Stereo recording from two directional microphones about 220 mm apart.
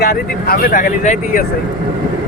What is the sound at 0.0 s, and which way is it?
Speech, 45° left (ahead or behind).